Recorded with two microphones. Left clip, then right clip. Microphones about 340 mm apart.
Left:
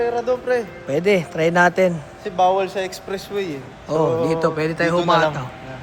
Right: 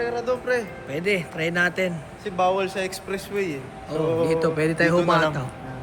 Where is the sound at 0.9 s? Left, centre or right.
Centre.